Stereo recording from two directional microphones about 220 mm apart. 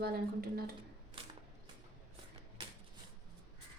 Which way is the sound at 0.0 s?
45° right (ahead or behind).